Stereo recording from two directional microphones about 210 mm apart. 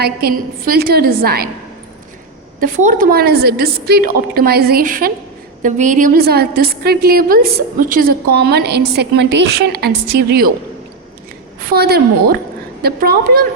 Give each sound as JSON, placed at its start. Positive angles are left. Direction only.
{"t": 0.0, "sound": "a woman's voice", "side_deg": -45}
{"t": 2.6, "sound": "a woman's voice", "side_deg": -40}
{"t": 11.7, "sound": "a woman's voice", "side_deg": -50}